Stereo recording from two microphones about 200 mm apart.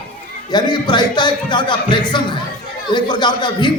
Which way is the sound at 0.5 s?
20° left (ahead or behind).